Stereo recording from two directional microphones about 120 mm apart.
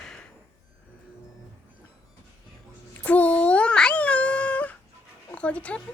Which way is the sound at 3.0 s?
10° left (ahead or behind).